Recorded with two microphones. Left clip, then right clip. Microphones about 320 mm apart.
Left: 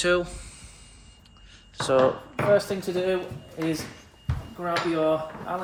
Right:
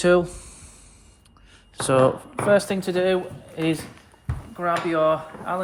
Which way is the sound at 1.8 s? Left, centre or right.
Right.